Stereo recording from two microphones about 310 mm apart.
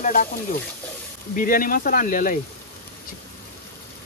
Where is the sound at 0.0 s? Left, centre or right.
Left.